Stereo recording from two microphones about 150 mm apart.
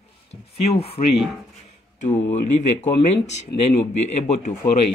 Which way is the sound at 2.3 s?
55° left (ahead or behind).